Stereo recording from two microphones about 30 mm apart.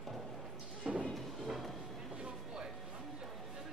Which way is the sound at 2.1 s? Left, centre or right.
Right.